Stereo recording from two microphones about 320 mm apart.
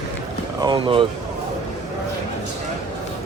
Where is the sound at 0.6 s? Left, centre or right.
Centre.